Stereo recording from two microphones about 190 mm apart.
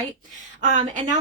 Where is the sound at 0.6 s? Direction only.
40° right (ahead or behind).